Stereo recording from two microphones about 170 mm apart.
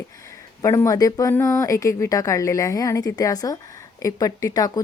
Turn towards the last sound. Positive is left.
turn(degrees=20)  # may be behind; listen again after turning